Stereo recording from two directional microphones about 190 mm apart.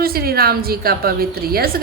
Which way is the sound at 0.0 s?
55° right (ahead or behind).